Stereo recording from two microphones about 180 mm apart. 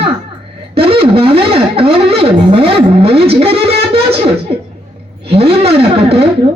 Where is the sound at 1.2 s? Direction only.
30° right (ahead or behind).